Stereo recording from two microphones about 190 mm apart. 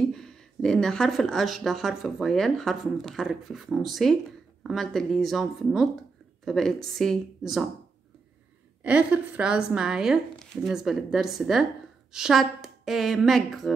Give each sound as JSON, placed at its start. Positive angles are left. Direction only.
{"t": 0.1, "sound": "speech", "side_deg": 5}
{"t": 8.8, "sound": "speech", "side_deg": -5}